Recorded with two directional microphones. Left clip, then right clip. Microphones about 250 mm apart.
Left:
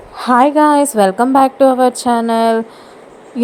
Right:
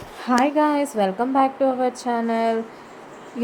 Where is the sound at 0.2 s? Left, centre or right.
Left.